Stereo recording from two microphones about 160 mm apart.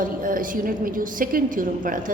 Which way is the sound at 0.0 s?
60° right (ahead or behind).